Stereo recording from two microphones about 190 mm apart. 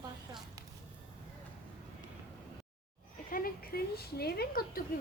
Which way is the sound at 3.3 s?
50° left (ahead or behind).